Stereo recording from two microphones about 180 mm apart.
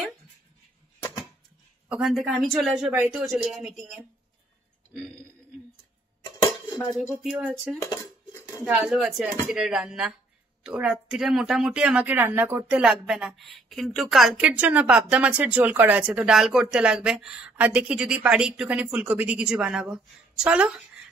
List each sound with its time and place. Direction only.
1.9 s speech: centre (ahead or behind)
7.0 s speech: 5° right (ahead or behind)
7.8 s dishes: 15° left (ahead or behind)
8.6 s speech: centre (ahead or behind)